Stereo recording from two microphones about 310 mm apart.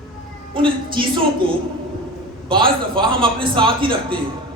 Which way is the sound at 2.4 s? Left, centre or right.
Centre.